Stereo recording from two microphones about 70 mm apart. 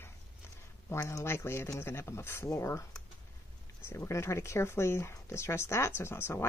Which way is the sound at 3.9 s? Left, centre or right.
Left.